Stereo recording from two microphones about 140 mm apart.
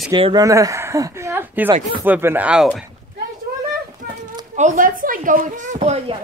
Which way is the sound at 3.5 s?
90° right.